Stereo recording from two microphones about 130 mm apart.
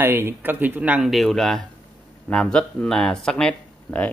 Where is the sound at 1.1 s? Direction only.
Centre (ahead or behind).